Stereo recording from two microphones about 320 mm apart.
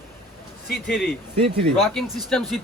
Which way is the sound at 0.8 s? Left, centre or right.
Centre.